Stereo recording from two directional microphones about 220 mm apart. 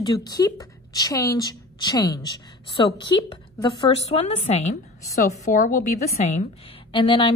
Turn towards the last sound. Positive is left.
turn(degrees=20)  # may be behind; listen again after turning